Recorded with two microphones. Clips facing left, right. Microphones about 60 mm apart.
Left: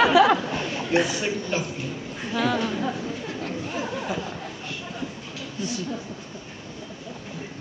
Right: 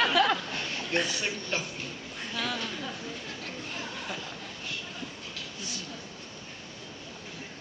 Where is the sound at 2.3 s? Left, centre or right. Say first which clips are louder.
Left 10 dB; centre.